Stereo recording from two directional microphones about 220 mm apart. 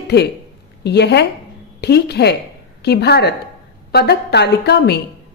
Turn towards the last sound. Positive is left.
turn(degrees=50)  # may be behind; listen again after turning